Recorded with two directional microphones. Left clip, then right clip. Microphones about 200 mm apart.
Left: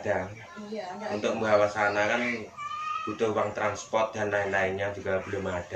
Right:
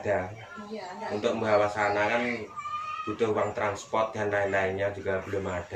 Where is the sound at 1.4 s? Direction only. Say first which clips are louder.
Left 2 dB; 15° left (ahead or behind).